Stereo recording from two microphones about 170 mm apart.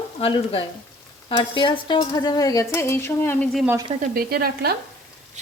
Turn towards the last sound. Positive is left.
turn(degrees=-65)  # may be behind; listen again after turning